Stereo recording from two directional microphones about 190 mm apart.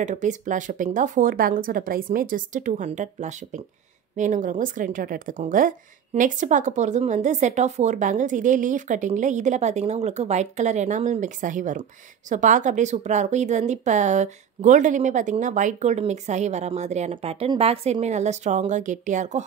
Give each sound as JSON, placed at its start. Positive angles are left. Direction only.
{"t": 0.0, "sound": "a woman's voice", "side_deg": -40}